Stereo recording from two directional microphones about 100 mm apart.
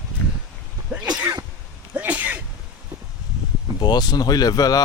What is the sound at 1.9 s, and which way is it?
Sneeze, 15° right (ahead or behind).